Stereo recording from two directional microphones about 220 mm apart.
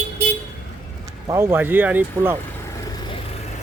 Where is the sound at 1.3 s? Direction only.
10° right (ahead or behind).